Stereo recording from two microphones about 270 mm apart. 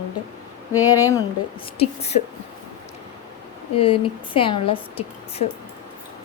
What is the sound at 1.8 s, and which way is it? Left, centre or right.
Speech, left.